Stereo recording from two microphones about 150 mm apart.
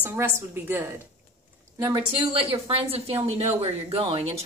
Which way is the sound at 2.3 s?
35° right (ahead or behind).